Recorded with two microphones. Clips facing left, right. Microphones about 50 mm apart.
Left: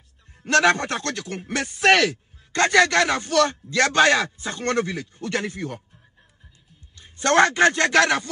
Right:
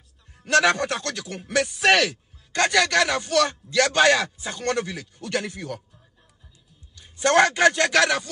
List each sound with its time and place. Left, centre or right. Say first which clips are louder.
0.4 s a man's voice: left 1 dB; left
7.3 s a man's voice: left 1 dB; left